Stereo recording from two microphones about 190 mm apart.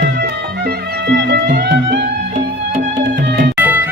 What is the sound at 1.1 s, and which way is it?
Music, 60° right (ahead or behind).